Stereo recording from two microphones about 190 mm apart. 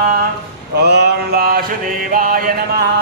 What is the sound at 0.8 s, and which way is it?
Mantra, 60° right (ahead or behind).